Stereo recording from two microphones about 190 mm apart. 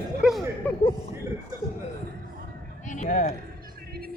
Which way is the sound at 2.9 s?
45° left (ahead or behind).